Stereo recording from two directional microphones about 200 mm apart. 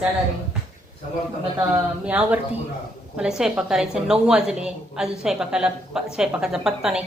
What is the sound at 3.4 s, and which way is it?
A woman's voice, 5° right (ahead or behind).